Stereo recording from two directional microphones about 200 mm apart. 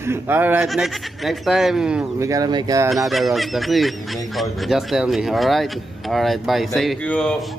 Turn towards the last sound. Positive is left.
turn(degrees=5)  # may be behind; listen again after turning